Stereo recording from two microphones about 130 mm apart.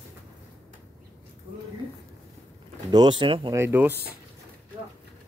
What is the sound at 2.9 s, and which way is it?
Speech, 35° right (ahead or behind).